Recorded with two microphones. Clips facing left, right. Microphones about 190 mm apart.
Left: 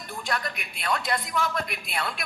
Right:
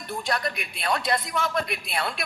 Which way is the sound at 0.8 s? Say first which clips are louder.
Right 2 dB; 30° right (ahead or behind).